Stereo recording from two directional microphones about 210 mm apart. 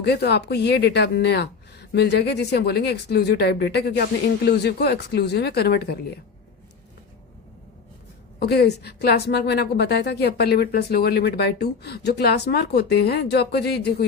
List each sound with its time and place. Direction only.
0.0 s a woman's voice: 50° left (ahead or behind)
8.4 s a woman's voice: 50° left (ahead or behind)